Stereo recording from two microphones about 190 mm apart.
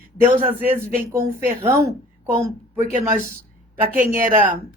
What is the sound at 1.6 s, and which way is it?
Speech, 15° right (ahead or behind).